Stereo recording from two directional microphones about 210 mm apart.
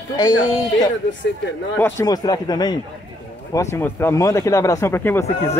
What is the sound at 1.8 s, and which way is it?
Speech, 10° left (ahead or behind).